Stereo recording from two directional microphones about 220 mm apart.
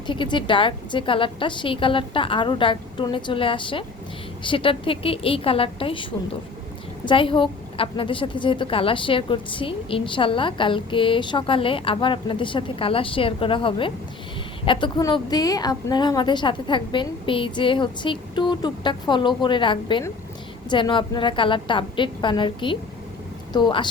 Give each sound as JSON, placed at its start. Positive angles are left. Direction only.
{"t": 0.1, "sound": "a woman's voice", "side_deg": 20}